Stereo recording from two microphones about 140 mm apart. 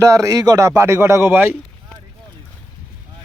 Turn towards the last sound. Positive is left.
turn(degrees=-15)  # may be behind; listen again after turning